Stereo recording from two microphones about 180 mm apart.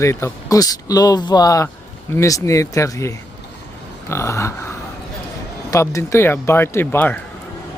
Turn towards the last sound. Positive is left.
turn(degrees=10)  # may be behind; listen again after turning